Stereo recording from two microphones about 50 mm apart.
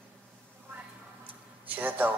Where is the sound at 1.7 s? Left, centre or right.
Right.